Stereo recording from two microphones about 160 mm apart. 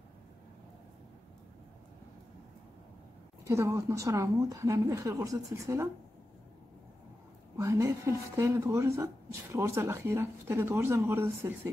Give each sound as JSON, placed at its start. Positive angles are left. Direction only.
{"t": 3.4, "sound": "a woman's voice", "side_deg": -15}
{"t": 7.5, "sound": "speech", "side_deg": -20}